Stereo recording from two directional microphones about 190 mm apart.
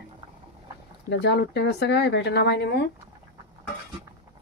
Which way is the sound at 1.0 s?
65° left (ahead or behind).